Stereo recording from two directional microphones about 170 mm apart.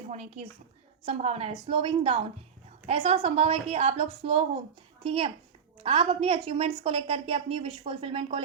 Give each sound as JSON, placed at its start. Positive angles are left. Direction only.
{"t": 0.1, "sound": "a woman's voice", "side_deg": -40}